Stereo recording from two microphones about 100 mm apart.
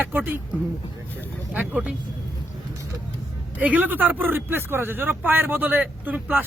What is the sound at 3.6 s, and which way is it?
Speech, 15° right (ahead or behind).